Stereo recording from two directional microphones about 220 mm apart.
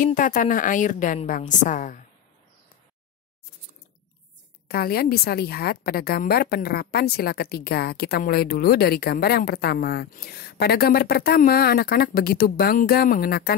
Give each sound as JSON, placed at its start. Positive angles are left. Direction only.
{"t": 0.0, "sound": "a woman's voice", "side_deg": 35}
{"t": 4.6, "sound": "a woman's voice", "side_deg": 45}